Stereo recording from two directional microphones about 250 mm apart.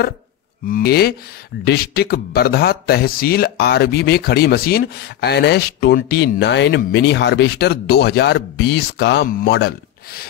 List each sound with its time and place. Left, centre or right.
0.7 s speech: left